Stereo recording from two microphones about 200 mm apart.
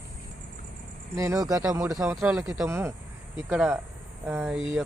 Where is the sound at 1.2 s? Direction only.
15° right (ahead or behind).